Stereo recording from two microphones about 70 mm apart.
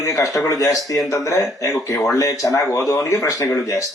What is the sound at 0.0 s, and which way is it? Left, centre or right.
Speech, left.